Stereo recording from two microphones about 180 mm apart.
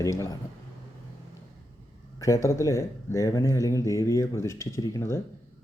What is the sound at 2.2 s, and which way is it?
Speech, 15° left (ahead or behind).